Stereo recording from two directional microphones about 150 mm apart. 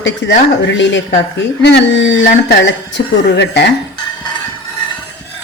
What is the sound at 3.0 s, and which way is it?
Speech, 90° left.